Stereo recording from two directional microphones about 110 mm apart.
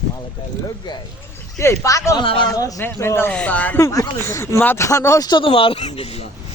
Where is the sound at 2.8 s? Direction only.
20° left (ahead or behind).